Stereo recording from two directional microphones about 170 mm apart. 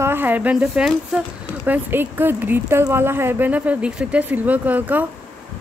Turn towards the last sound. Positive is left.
turn(degrees=-10)  # may be behind; listen again after turning